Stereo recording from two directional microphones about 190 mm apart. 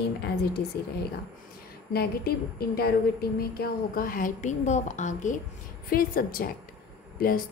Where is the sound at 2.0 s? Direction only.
55° left (ahead or behind).